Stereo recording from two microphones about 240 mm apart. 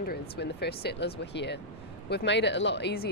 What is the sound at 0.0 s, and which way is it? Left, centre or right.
Speech, left.